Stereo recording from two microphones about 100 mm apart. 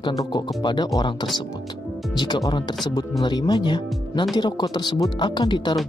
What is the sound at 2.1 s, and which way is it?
Speech, 50° left (ahead or behind).